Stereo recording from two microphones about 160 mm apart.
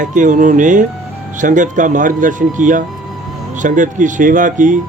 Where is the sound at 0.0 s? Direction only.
50° right (ahead or behind).